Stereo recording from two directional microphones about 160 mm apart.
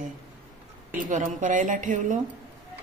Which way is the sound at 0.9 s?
50° right (ahead or behind).